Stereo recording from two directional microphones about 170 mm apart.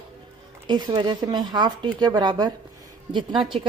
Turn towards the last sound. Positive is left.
turn(degrees=-30)  # may be behind; listen again after turning